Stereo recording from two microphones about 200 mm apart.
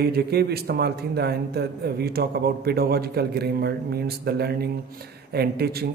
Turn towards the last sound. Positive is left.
turn(degrees=-50)  # may be behind; listen again after turning